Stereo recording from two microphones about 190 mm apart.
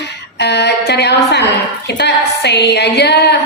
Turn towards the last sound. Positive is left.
turn(degrees=60)  # may be behind; listen again after turning